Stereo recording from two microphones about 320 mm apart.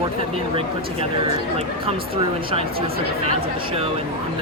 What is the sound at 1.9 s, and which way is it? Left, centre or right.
Speech, centre.